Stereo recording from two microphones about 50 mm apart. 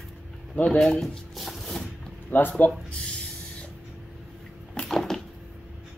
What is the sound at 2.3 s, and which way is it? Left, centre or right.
Speech, left.